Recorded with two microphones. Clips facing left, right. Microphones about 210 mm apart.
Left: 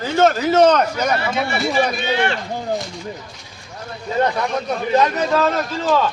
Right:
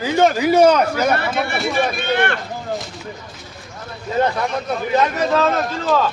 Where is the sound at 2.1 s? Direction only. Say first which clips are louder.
Right 2 dB; 55° right (ahead or behind).